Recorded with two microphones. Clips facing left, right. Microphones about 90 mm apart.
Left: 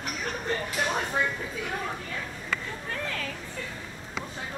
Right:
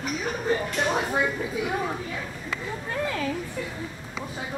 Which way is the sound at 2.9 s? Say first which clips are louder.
Right 6 dB; 15° right (ahead or behind).